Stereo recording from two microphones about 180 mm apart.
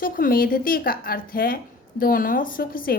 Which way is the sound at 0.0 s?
50° left (ahead or behind).